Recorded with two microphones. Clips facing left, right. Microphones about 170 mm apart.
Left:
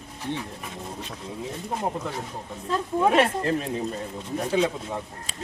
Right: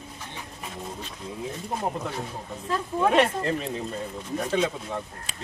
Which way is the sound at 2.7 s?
10° left (ahead or behind).